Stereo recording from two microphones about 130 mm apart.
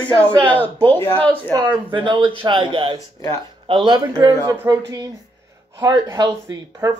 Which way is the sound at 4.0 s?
30° right (ahead or behind).